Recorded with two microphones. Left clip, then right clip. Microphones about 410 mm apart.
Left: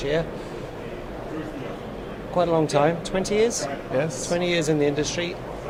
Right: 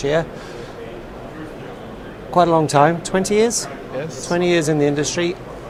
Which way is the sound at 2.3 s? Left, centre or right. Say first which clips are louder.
Right 7 dB; right.